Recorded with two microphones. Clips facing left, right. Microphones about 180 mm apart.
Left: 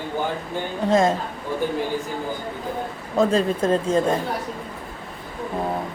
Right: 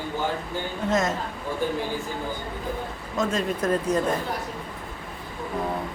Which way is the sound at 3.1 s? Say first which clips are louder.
Left 6 dB; 35° left (ahead or behind).